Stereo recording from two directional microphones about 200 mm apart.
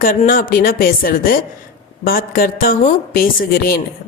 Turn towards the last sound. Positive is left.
turn(degrees=45)  # may be behind; listen again after turning